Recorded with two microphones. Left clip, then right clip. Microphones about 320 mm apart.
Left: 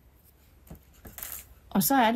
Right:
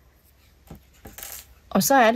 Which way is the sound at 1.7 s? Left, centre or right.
Right.